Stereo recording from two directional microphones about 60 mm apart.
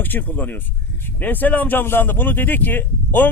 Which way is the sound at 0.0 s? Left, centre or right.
Left.